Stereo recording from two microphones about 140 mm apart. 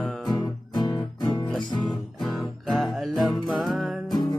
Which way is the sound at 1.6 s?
35° left (ahead or behind).